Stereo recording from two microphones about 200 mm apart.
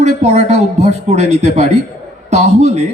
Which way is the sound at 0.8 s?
35° right (ahead or behind).